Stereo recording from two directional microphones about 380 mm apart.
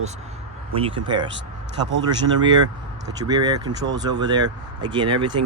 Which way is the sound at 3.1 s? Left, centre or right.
Centre.